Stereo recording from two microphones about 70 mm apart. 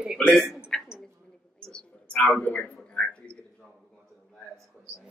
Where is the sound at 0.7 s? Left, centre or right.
Centre.